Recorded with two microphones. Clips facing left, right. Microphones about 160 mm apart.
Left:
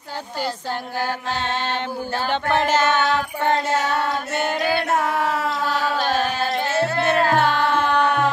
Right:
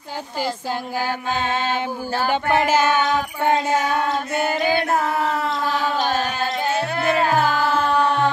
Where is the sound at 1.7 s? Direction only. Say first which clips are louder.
Right 2 dB; 10° right (ahead or behind).